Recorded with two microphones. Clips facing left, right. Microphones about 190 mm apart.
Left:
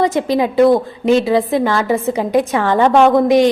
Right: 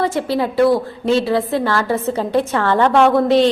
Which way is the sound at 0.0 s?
20° left (ahead or behind).